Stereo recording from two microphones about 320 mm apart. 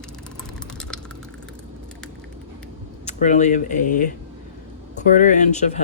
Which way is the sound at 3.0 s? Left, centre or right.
Left.